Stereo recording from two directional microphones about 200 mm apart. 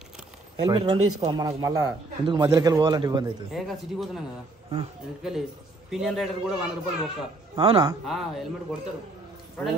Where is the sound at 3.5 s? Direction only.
Centre (ahead or behind).